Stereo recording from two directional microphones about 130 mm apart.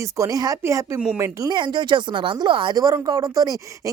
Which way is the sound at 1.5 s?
35° right (ahead or behind).